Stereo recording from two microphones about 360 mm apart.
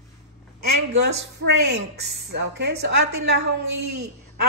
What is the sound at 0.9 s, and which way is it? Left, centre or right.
Speech, right.